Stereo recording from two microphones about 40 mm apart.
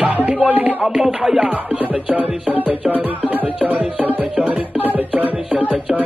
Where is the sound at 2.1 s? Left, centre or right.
Right.